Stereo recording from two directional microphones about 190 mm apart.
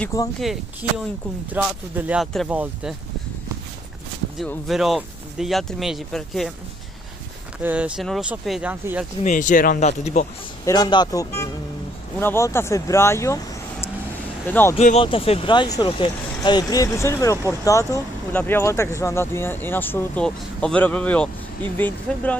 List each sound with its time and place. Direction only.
0.1 s speech: 15° left (ahead or behind)
0.8 s speech: 10° right (ahead or behind)
4.4 s speech: centre (ahead or behind)
7.6 s speech: 5° right (ahead or behind)
9.2 s speech: 40° left (ahead or behind)
10.6 s speech: 20° left (ahead or behind)
14.8 s speech: 35° left (ahead or behind); by 22.4 s 10° left (ahead or behind)